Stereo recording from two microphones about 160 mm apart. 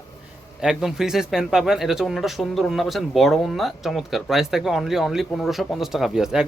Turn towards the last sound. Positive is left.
turn(degrees=-5)  # may be behind; listen again after turning